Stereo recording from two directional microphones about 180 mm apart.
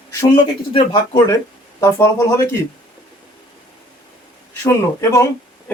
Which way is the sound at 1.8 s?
15° left (ahead or behind).